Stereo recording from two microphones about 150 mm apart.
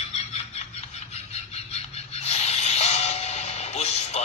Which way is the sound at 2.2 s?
45° left (ahead or behind).